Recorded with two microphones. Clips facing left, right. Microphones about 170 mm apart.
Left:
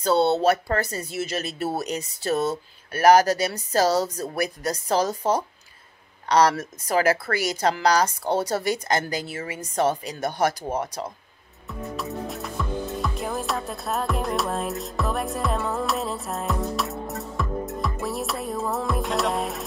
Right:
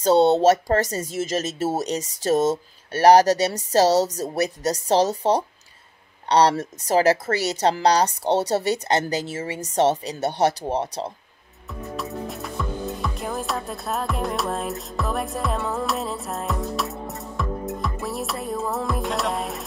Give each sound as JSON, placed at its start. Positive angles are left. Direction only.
{"t": 0.0, "sound": "a woman's voice", "side_deg": -40}
{"t": 12.0, "sound": "music", "side_deg": 0}